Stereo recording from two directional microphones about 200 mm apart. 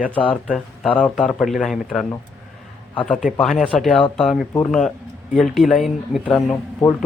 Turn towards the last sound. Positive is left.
turn(degrees=5)  # may be behind; listen again after turning